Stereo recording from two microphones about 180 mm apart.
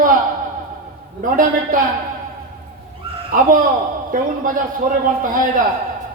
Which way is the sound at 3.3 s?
50° right (ahead or behind).